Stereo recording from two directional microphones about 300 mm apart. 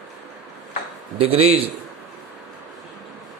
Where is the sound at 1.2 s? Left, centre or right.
Centre.